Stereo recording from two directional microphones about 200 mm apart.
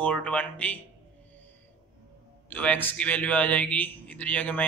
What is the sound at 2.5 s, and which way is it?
A man's voice, 5° left (ahead or behind).